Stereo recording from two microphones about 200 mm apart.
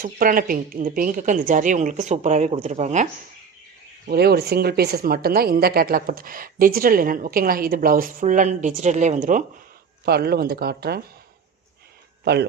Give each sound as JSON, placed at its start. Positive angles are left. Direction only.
{"t": 0.0, "sound": "a woman's voice", "side_deg": -45}
{"t": 4.0, "sound": "speech", "side_deg": -50}
{"t": 10.1, "sound": "speech", "side_deg": -50}
{"t": 12.2, "sound": "a man's voice", "side_deg": -55}